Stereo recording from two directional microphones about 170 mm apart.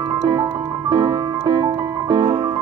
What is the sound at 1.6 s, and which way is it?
Music, 25° right (ahead or behind).